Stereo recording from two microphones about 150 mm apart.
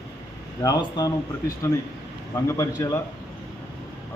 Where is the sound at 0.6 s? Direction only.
25° left (ahead or behind).